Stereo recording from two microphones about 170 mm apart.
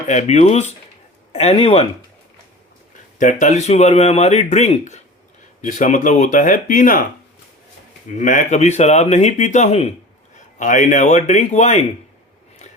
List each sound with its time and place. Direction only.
0.1 s speech: 40° left (ahead or behind)
3.2 s speech: 50° left (ahead or behind)
8.2 s speech: 45° left (ahead or behind)